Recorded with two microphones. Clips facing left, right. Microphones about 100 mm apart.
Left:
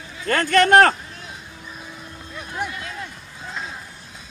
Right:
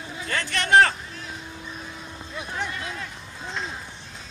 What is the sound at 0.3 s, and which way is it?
Speech, 50° left (ahead or behind).